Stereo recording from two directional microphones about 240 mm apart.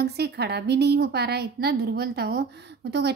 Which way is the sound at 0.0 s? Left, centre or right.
Right.